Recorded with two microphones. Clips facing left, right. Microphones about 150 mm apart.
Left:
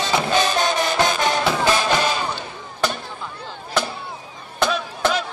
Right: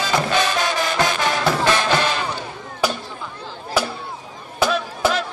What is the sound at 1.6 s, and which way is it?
Music, 10° left (ahead or behind).